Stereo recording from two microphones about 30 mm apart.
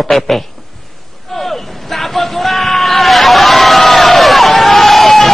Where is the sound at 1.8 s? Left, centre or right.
Centre.